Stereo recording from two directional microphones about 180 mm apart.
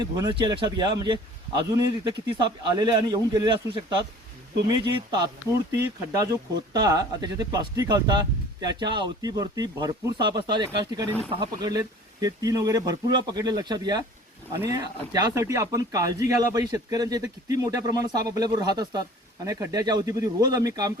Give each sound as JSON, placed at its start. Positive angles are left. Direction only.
{"t": 0.0, "sound": "speech", "side_deg": -25}